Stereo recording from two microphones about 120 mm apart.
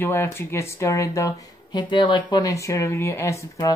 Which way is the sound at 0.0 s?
20° left (ahead or behind).